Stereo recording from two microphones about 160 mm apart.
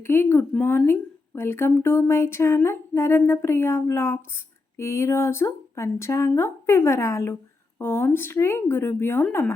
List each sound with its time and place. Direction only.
0.0 s humming: 15° left (ahead or behind)